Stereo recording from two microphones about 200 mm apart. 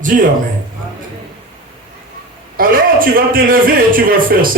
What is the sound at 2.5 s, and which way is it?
A man's voice, 45° right (ahead or behind).